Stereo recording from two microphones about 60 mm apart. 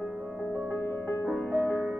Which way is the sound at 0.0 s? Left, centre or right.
Right.